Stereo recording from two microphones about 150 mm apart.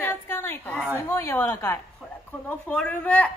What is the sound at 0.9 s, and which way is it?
A woman's voice, 15° left (ahead or behind).